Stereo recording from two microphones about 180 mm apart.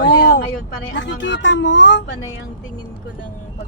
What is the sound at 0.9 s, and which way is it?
Speech, 80° left.